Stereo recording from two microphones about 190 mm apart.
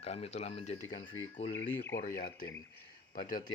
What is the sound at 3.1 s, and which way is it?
Speech, 45° left (ahead or behind).